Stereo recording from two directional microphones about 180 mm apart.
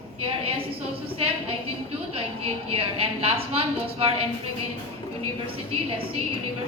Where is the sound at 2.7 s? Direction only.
30° right (ahead or behind).